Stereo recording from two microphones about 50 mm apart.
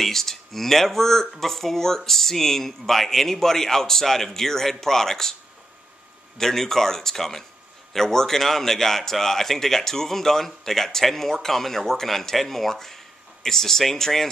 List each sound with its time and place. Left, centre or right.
0.0 s speech: centre
6.3 s speech: centre